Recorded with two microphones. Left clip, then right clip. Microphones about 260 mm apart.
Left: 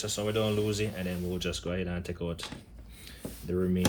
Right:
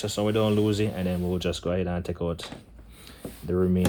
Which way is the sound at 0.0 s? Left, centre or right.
Right.